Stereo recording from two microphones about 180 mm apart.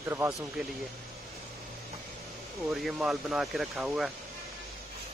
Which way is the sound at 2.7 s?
Centre (ahead or behind).